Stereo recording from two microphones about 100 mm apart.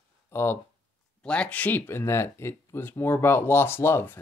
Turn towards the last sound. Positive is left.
turn(degrees=25)  # may be behind; listen again after turning